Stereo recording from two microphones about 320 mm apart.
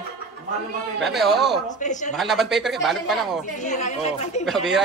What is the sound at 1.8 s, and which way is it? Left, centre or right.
Speech, left.